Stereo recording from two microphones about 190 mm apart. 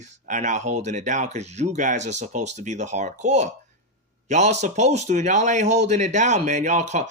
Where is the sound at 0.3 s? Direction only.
40° right (ahead or behind).